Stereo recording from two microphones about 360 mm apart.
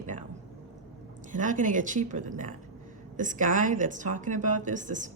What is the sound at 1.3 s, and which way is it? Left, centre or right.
Speech, right.